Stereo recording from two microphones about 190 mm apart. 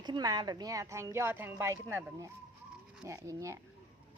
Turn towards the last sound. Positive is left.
turn(degrees=-15)  # may be behind; listen again after turning